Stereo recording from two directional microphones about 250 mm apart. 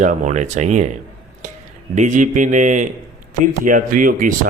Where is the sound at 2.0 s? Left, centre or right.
Right.